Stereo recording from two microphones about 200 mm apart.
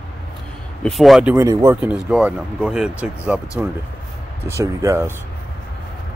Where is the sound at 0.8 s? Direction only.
Centre (ahead or behind).